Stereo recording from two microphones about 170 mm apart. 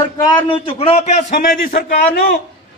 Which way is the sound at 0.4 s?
30° left (ahead or behind).